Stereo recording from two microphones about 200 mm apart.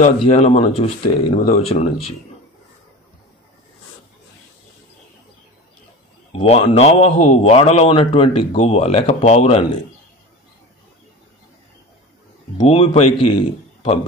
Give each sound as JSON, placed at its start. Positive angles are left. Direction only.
{"t": 0.0, "sound": "a man's voice", "side_deg": 30}
{"t": 6.3, "sound": "a man's voice", "side_deg": 25}
{"t": 12.5, "sound": "a man's voice", "side_deg": 30}